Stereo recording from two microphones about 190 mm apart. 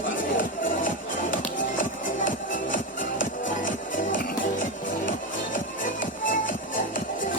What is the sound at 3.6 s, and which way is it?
Music, 45° left (ahead or behind).